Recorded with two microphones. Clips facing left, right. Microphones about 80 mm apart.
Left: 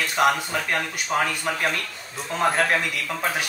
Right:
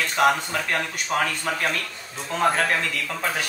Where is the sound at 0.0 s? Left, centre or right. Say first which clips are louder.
Right 1 dB; centre.